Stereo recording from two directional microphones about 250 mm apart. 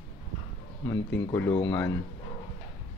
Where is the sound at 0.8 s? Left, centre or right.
Centre.